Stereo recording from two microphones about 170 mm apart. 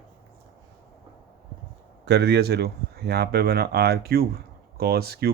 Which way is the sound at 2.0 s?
75° right (ahead or behind).